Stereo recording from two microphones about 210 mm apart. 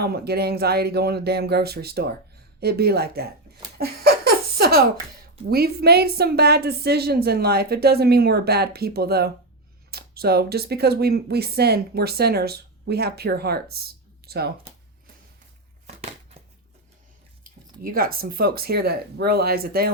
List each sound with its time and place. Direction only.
0.0 s speech: 50° right (ahead or behind)
3.8 s laughter: 45° right (ahead or behind)
5.5 s speech: 50° right (ahead or behind)
17.4 s speech: 45° right (ahead or behind)